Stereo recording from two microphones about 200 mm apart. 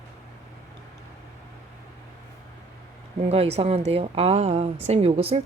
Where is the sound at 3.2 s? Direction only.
30° right (ahead or behind).